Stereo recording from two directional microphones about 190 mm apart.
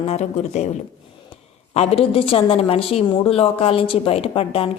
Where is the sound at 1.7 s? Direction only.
35° left (ahead or behind).